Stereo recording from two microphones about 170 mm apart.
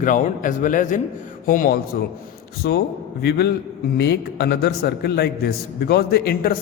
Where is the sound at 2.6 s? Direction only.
70° left (ahead or behind).